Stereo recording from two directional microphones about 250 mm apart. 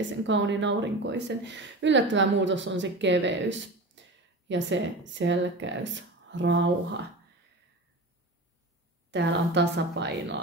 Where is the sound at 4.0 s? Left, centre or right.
Right.